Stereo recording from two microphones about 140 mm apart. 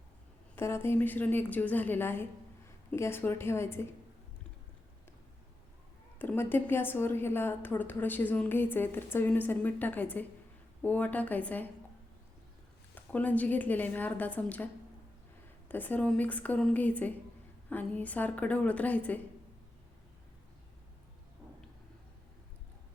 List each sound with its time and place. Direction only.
0.5 s a woman's voice: 15° left (ahead or behind)
6.1 s a woman's voice: 15° left (ahead or behind)
12.9 s a woman's voice: 10° left (ahead or behind)
15.7 s a woman's voice: 10° left (ahead or behind)